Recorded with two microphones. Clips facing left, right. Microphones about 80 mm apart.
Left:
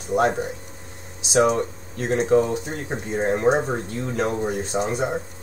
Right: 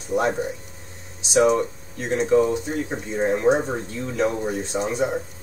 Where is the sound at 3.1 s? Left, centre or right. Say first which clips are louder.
Even; left.